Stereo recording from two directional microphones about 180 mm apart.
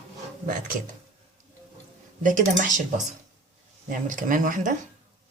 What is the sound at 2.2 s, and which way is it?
Speech, 45° right (ahead or behind).